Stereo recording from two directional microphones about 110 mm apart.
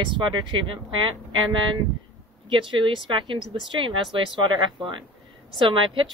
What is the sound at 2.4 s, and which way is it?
Speech, 50° right (ahead or behind).